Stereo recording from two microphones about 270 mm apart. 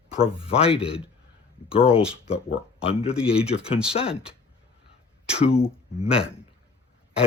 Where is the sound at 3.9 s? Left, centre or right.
Left.